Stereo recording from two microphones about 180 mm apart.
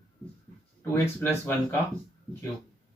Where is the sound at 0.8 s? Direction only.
10° left (ahead or behind).